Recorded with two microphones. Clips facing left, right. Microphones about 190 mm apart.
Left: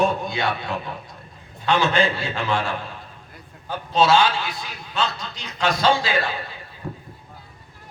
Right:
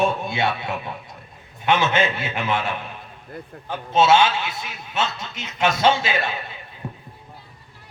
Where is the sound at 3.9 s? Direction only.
25° right (ahead or behind).